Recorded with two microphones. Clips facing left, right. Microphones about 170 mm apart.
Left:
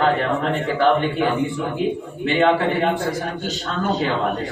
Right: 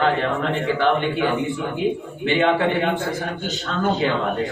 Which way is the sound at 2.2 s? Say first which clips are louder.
Left 1 dB; 35° left (ahead or behind).